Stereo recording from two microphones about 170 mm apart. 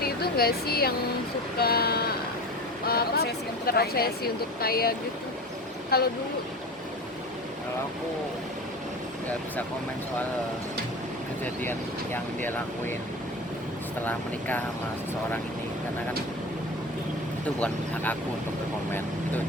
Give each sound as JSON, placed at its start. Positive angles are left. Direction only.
{"t": 0.0, "sound": "a sound", "side_deg": 65}
{"t": 1.5, "sound": "speech", "side_deg": 65}
{"t": 11.6, "sound": "speech", "side_deg": 10}
{"t": 14.0, "sound": "speech", "side_deg": 10}
{"t": 17.6, "sound": "speech", "side_deg": 10}